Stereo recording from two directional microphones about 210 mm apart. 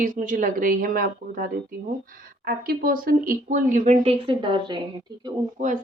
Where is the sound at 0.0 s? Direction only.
40° right (ahead or behind).